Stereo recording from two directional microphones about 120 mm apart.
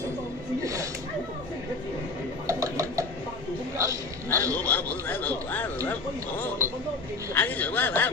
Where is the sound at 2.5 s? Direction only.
25° right (ahead or behind).